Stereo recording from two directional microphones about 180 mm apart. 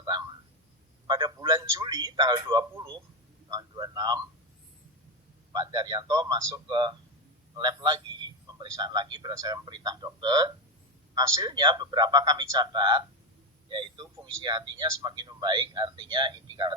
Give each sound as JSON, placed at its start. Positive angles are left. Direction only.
{"t": 0.0, "sound": "a sound", "side_deg": -25}
{"t": 1.0, "sound": "a man's voice", "side_deg": -25}
{"t": 5.5, "sound": "speech", "side_deg": -25}